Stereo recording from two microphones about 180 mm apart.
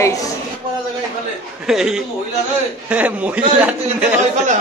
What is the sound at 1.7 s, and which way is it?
A man's voice, 5° right (ahead or behind).